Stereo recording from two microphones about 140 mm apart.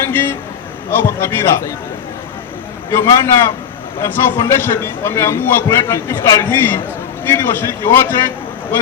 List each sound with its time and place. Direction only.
0.0 s a man's voice: 15° left (ahead or behind)
2.9 s a man's voice: 20° left (ahead or behind)